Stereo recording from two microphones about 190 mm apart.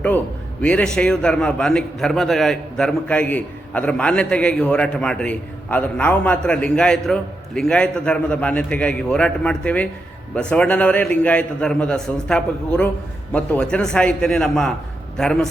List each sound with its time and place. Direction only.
0.6 s a man's voice: 5° left (ahead or behind)